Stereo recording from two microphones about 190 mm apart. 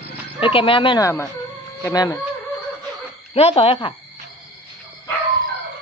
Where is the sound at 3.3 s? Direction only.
30° left (ahead or behind).